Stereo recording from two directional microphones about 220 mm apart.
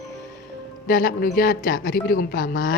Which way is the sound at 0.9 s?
40° left (ahead or behind).